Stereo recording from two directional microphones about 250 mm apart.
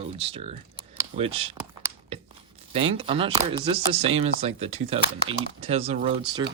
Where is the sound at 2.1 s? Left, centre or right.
Right.